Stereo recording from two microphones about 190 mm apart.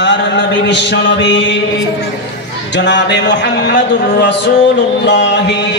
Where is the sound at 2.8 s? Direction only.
70° left (ahead or behind).